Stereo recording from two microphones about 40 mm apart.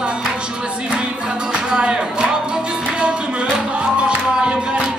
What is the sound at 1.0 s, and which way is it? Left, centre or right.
Music, right.